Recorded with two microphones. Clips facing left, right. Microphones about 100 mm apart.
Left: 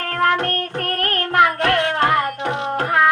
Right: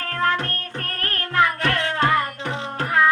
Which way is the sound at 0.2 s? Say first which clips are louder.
Left 5 dB; 65° left (ahead or behind).